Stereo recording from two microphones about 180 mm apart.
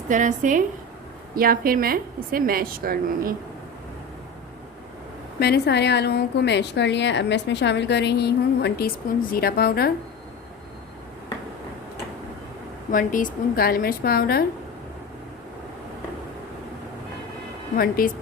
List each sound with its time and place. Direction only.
0.1 s a woman's voice: 45° right (ahead or behind)
5.4 s a woman's voice: 65° left (ahead or behind)
12.9 s a woman's voice: 50° left (ahead or behind)
17.7 s speech: 55° left (ahead or behind)